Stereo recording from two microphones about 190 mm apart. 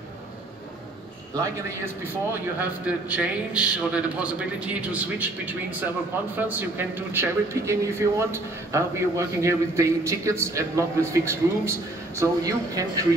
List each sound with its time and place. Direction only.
2.3 s speech: 10° right (ahead or behind)